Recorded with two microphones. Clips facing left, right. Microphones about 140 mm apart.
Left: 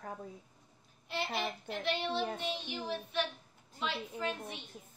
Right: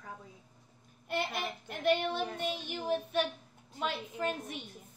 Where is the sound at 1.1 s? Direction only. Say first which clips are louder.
Right 1 dB; 50° right (ahead or behind).